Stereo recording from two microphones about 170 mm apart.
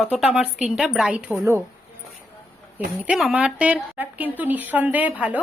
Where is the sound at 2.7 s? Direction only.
5° right (ahead or behind).